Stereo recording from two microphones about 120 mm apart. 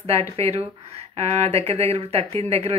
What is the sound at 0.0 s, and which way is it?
Speech, 60° right (ahead or behind).